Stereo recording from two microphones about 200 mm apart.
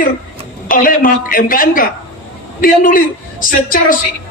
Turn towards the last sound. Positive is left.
turn(degrees=45)  # may be behind; listen again after turning